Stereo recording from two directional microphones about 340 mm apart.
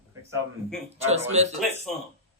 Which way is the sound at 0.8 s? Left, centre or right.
Centre.